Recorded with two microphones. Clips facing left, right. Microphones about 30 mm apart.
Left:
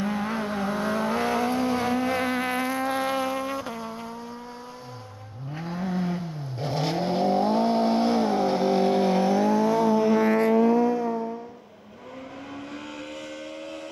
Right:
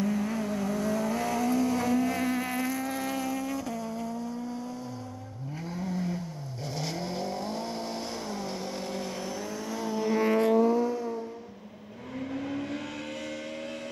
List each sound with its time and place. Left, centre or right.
0.0 s vehicle: left
5.6 s vehicle: left